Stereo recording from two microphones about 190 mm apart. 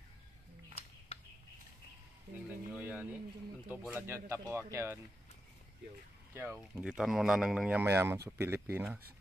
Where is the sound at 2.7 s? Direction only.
5° right (ahead or behind).